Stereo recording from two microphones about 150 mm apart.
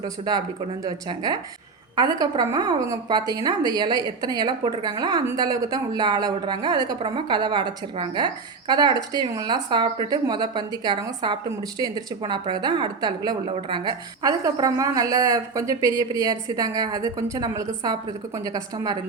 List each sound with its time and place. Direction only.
0.0 s a woman's voice: 25° right (ahead or behind)